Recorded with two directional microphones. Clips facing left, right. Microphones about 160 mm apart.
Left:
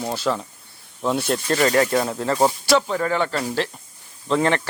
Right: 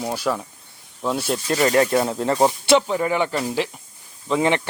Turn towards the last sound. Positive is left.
turn(degrees=-10)  # may be behind; listen again after turning